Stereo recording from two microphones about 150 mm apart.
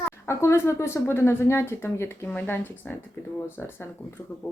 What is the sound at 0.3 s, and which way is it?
Speech, 15° left (ahead or behind).